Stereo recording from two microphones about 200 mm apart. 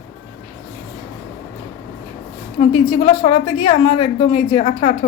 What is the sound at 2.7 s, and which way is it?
Speech, 25° left (ahead or behind).